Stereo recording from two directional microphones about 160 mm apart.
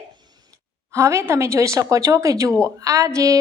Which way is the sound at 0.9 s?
15° right (ahead or behind).